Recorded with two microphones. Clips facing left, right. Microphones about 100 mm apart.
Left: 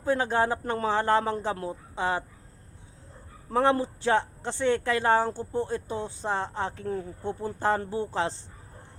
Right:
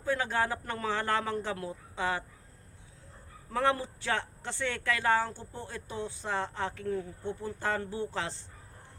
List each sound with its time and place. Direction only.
0.0 s speech: 30° left (ahead or behind)
3.5 s speech: 30° left (ahead or behind)